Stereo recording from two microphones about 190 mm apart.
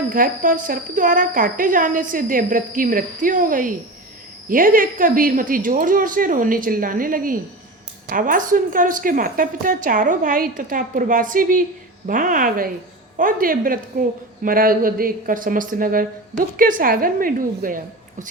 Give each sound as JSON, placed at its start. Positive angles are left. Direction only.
{"t": 0.1, "sound": "speech", "side_deg": -45}